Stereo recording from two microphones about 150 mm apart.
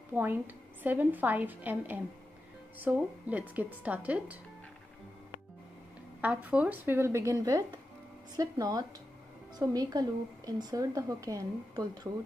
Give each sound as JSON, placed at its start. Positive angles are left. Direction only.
{"t": 0.1, "sound": "a woman's voice", "side_deg": -10}
{"t": 6.2, "sound": "a woman's voice", "side_deg": -10}